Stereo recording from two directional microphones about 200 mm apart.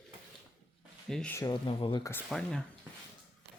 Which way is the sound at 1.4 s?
20° left (ahead or behind).